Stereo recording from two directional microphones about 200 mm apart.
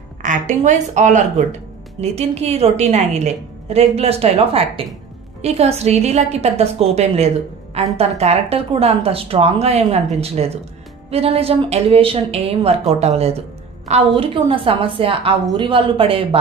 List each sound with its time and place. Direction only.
0.2 s a woman's voice: 40° right (ahead or behind)